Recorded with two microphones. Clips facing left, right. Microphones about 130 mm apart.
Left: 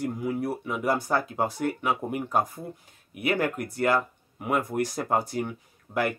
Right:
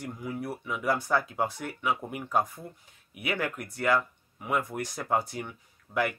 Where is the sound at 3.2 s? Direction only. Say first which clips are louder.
Left 6 dB; 35° left (ahead or behind).